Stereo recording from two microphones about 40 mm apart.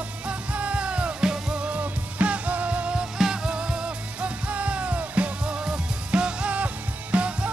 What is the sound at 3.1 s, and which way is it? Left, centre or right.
Music, centre.